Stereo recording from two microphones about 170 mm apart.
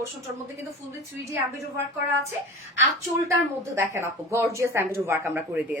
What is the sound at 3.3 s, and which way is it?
A woman's voice, 15° right (ahead or behind).